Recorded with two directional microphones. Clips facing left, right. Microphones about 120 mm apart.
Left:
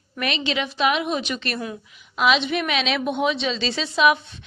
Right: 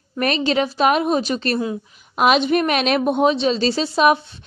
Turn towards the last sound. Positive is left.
turn(degrees=-40)  # may be behind; listen again after turning